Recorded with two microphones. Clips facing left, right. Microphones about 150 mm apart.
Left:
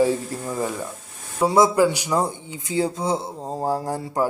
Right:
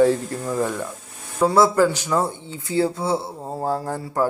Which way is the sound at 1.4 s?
15° left (ahead or behind).